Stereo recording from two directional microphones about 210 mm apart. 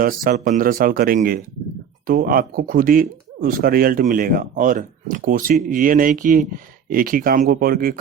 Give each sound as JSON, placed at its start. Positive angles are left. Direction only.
{"t": 0.0, "sound": "a man's voice", "side_deg": -45}